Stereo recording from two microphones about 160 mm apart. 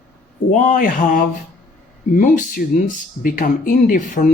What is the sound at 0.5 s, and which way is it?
Speech, 55° left (ahead or behind).